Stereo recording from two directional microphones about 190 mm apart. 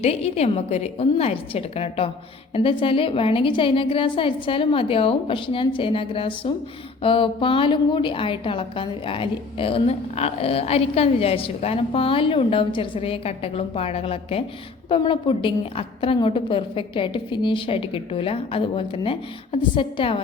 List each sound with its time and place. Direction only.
0.0 s a woman's voice: 35° left (ahead or behind)